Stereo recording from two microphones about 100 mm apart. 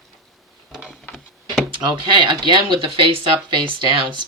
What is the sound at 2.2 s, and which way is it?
Speech, 50° right (ahead or behind).